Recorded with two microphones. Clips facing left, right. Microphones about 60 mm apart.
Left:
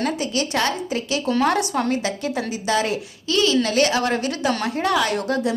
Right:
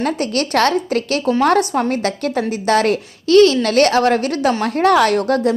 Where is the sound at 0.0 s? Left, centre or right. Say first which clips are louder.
Right 4 dB; right.